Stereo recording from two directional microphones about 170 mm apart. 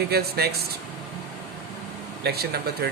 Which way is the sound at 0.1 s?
70° right (ahead or behind).